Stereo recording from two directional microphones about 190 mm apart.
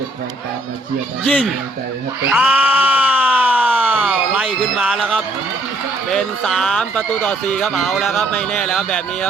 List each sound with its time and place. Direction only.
1.2 s speech: 5° left (ahead or behind)
2.3 s a sound: 5° right (ahead or behind)
6.1 s speech: centre (ahead or behind)